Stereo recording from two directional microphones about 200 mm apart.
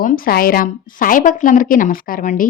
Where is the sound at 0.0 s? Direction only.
45° left (ahead or behind).